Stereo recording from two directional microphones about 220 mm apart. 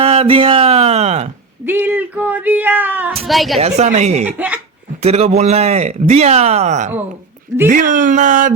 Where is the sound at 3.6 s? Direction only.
30° right (ahead or behind).